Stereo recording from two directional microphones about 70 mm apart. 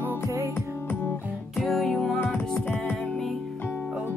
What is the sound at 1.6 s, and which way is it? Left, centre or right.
Music, centre.